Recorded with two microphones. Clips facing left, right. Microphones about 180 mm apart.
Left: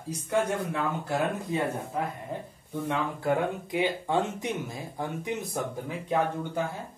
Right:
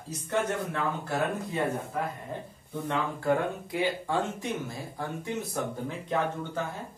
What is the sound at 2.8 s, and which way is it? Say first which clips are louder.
Speech: even; 15° left (ahead or behind).